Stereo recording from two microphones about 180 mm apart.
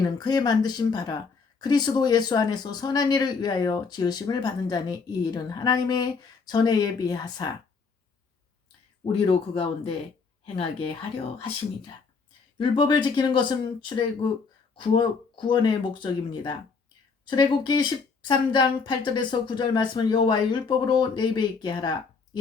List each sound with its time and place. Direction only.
0.0 s speech: 20° left (ahead or behind)
9.2 s speech: 30° left (ahead or behind)
12.5 s speech: 25° left (ahead or behind)